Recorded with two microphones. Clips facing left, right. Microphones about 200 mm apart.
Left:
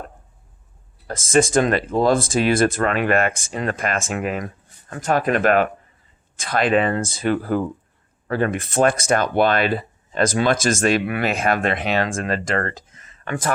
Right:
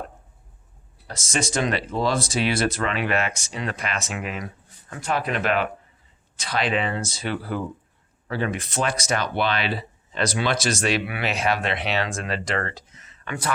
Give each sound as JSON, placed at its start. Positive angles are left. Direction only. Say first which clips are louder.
{"t": 1.0, "sound": "speech", "louder": "left 10 dB", "side_deg": 50}